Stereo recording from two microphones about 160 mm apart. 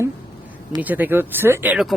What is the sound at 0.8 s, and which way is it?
Speech, 10° right (ahead or behind).